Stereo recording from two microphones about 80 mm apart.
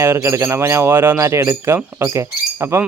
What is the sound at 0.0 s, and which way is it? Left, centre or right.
Speech, right.